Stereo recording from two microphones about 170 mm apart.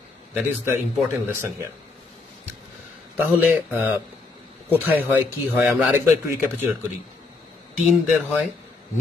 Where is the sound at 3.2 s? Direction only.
10° right (ahead or behind).